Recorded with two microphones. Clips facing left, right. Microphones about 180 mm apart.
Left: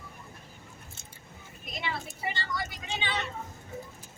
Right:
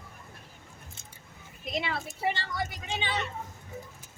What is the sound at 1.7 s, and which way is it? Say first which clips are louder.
Speech: right 4 dB; 75° right (ahead or behind).